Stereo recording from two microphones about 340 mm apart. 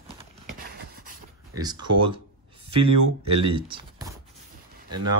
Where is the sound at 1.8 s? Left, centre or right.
Right.